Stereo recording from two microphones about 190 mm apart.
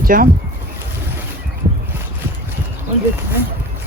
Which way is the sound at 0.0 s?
50° right (ahead or behind).